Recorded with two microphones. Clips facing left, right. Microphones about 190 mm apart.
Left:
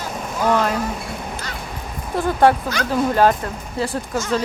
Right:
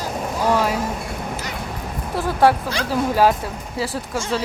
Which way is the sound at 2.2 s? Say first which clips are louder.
Left 1 dB; 5° right (ahead or behind).